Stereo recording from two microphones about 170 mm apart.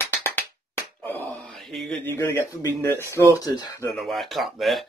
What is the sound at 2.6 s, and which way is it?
Speech, 20° left (ahead or behind).